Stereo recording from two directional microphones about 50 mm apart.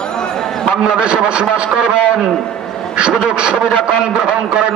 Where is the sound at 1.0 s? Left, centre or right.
Centre.